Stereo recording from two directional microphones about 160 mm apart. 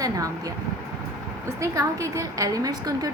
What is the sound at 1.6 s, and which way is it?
A woman's voice, 20° right (ahead or behind).